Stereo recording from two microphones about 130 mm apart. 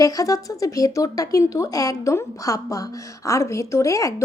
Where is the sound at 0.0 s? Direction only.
25° left (ahead or behind).